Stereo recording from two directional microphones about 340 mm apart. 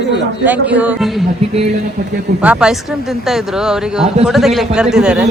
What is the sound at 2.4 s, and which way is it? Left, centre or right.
Speech, centre.